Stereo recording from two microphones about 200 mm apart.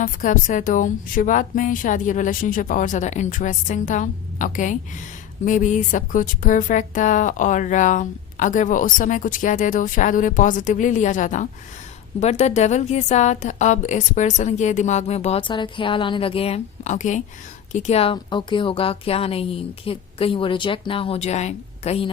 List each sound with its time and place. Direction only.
0.0 s a woman's voice: 40° left (ahead or behind)